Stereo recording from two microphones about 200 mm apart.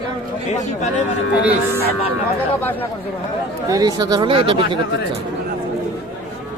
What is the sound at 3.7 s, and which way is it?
Speech, 20° right (ahead or behind).